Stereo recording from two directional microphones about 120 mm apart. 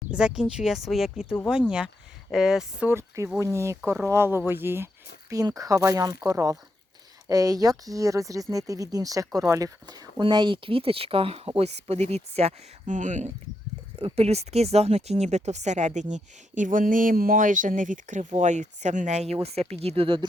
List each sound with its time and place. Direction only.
0.1 s speech: 10° right (ahead or behind)
2.9 s speech: 20° right (ahead or behind)
5.3 s speech: 30° right (ahead or behind); by 13.3 s 90° right
14.0 s speech: 60° right (ahead or behind)